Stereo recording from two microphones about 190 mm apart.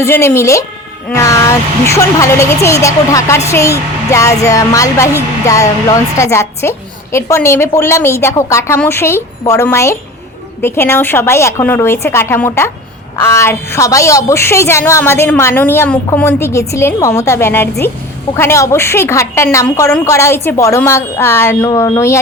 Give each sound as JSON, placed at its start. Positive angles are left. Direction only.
{"t": 0.0, "sound": "a woman's voice", "side_deg": 15}